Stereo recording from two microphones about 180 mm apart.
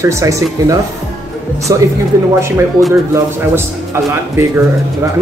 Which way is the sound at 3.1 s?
15° right (ahead or behind).